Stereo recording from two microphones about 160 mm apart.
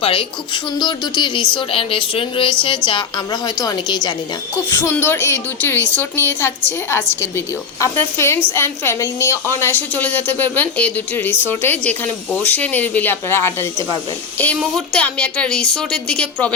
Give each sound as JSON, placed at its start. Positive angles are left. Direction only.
{"t": 0.0, "sound": "speech", "side_deg": 35}
{"t": 4.7, "sound": "a woman's voice", "side_deg": 15}